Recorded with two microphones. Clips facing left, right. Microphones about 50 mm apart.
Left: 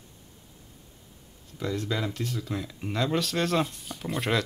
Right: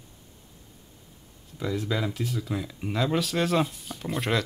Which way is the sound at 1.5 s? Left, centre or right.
Centre.